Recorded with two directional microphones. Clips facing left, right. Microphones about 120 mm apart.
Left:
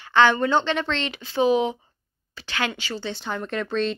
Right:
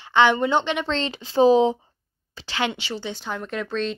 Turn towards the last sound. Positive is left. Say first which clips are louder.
# left 2 dB
turn(degrees=0)  # may be behind; listen again after turning